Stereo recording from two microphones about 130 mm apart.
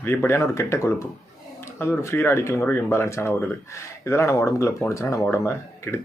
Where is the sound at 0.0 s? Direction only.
20° left (ahead or behind).